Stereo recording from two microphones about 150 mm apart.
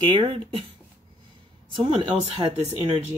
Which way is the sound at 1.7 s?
40° right (ahead or behind).